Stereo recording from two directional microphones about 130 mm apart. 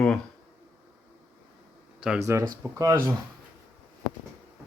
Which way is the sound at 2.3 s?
20° right (ahead or behind).